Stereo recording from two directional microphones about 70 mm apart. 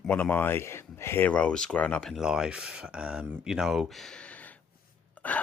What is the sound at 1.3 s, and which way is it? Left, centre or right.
Speech, centre.